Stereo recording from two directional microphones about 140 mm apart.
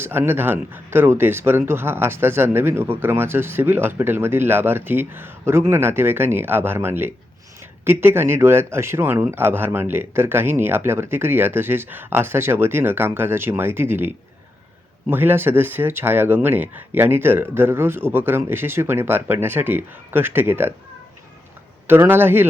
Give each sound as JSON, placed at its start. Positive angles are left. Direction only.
{"t": 0.0, "sound": "speech", "side_deg": -15}
{"t": 15.1, "sound": "speech", "side_deg": -15}
{"t": 21.8, "sound": "speech", "side_deg": -15}